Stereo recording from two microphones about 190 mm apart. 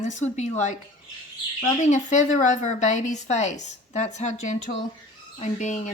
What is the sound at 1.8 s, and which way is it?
Speech, 40° left (ahead or behind).